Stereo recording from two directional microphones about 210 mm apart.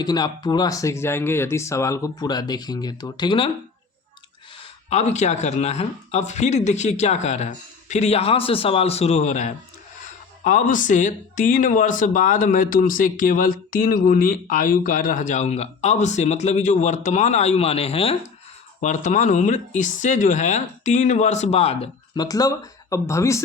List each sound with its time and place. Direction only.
0.0 s speech: 20° left (ahead or behind)
4.9 s speech: 30° left (ahead or behind); by 23.4 s 15° left (ahead or behind)